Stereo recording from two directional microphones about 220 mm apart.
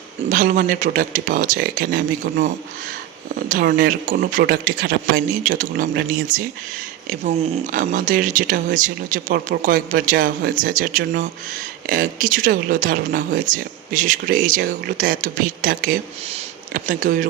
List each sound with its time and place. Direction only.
0.3 s speech: 40° right (ahead or behind)
3.5 s speech: 40° right (ahead or behind)